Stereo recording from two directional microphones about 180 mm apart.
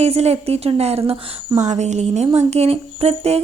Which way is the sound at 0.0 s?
35° right (ahead or behind).